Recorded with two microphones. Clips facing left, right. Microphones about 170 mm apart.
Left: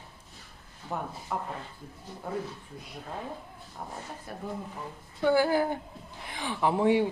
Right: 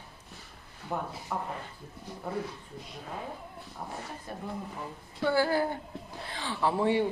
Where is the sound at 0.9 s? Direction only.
10° right (ahead or behind).